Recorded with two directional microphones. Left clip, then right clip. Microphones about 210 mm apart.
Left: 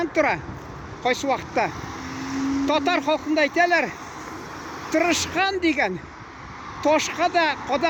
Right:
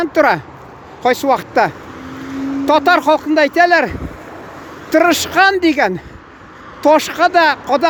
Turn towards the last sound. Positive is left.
turn(degrees=-30)  # may be behind; listen again after turning